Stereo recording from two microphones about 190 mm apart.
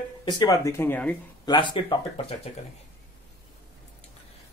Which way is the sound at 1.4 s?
25° left (ahead or behind).